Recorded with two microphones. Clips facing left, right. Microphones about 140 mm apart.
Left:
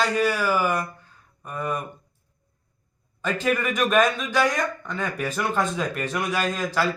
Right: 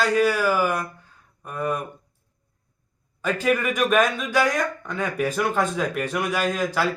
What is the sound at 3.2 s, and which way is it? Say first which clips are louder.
A man's voice: right 2 dB; 10° right (ahead or behind).